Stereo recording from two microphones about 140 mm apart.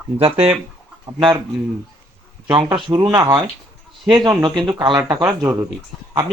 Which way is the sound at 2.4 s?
35° right (ahead or behind).